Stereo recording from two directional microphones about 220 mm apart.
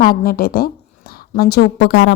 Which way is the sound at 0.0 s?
40° left (ahead or behind).